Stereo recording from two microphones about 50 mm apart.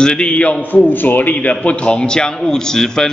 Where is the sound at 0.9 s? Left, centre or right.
Left.